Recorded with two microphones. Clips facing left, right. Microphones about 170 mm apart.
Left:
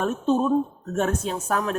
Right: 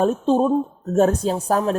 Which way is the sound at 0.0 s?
30° right (ahead or behind).